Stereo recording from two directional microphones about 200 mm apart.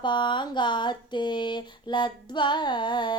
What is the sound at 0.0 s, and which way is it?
Speech, 25° left (ahead or behind).